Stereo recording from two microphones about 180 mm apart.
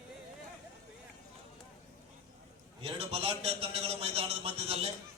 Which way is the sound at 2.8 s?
35° right (ahead or behind).